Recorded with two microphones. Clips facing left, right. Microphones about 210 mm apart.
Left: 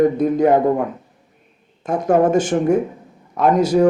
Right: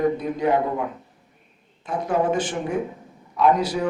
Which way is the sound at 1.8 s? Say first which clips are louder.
Left 7 dB; 45° left (ahead or behind).